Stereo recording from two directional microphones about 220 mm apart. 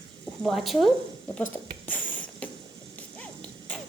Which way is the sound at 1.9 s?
5° left (ahead or behind).